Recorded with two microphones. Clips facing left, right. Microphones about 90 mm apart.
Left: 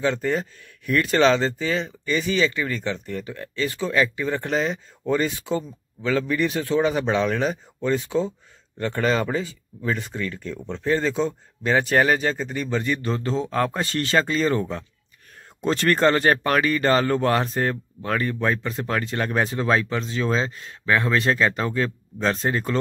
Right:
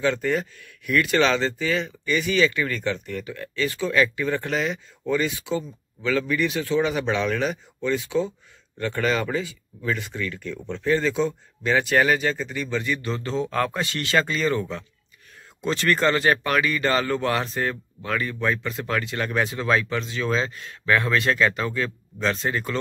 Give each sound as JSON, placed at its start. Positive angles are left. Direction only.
{"t": 0.0, "sound": "speech", "side_deg": 25}